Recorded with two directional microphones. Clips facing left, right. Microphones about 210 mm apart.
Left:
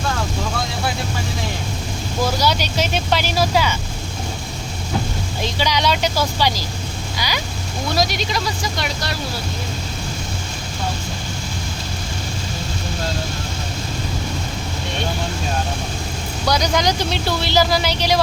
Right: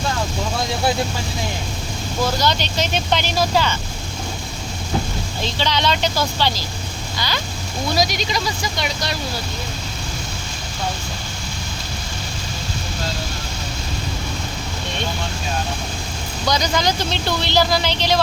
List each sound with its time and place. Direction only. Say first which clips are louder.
2.2 s speech: left 1 dB; 10° left (ahead or behind)
5.4 s speech: left 1 dB; 10° left (ahead or behind)
7.9 s speech: left 1 dB; centre (ahead or behind)
16.5 s speech: left 1 dB; 10° left (ahead or behind)